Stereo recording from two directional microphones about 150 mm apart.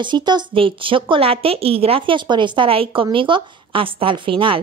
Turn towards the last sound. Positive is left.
turn(degrees=-35)  # may be behind; listen again after turning